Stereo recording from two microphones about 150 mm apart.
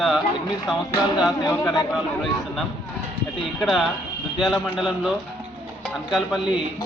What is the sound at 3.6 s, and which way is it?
Speech, centre (ahead or behind).